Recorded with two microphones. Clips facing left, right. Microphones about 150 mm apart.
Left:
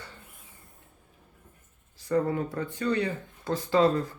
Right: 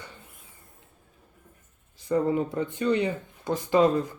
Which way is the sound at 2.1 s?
20° right (ahead or behind).